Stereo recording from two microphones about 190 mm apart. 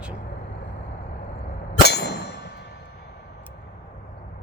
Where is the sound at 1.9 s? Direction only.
60° left (ahead or behind).